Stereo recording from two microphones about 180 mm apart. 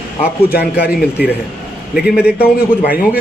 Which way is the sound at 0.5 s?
60° left (ahead or behind).